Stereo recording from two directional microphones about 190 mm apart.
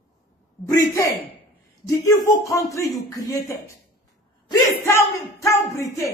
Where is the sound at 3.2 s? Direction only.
15° left (ahead or behind).